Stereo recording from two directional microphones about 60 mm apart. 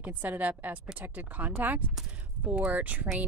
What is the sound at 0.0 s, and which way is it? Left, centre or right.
A woman's voice, right.